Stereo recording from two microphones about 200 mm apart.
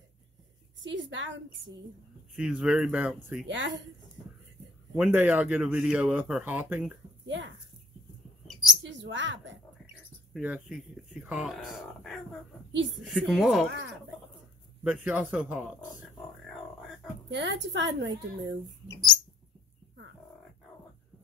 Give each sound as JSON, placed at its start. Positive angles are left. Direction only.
{"t": 0.7, "sound": "a woman's voice", "side_deg": -65}
{"t": 2.3, "sound": "speech", "side_deg": -5}
{"t": 3.4, "sound": "a woman's voice", "side_deg": -65}
{"t": 4.9, "sound": "speech", "side_deg": -5}
{"t": 7.2, "sound": "speech", "side_deg": -65}
{"t": 8.8, "sound": "a woman's voice", "side_deg": -65}
{"t": 10.3, "sound": "speech", "side_deg": -5}
{"t": 14.8, "sound": "a man's voice", "side_deg": -5}
{"t": 17.3, "sound": "a woman's voice", "side_deg": -65}